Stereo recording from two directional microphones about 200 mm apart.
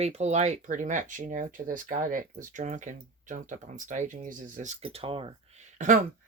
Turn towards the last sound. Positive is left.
turn(degrees=-40)  # may be behind; listen again after turning